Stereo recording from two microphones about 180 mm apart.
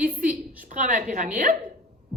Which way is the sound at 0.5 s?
45° right (ahead or behind).